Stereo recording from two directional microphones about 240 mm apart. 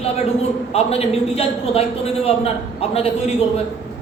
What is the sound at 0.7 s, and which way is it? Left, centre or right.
A man's voice, left.